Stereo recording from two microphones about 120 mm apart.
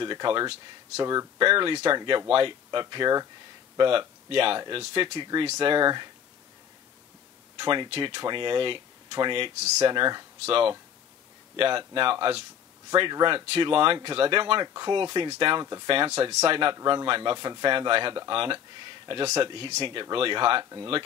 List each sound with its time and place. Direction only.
0.0 s speech: 40° right (ahead or behind)
1.4 s speech: 45° right (ahead or behind)
7.5 s speech: 40° right (ahead or behind)
10.4 s speech: 50° right (ahead or behind)